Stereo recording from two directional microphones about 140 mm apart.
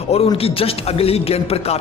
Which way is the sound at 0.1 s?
45° left (ahead or behind).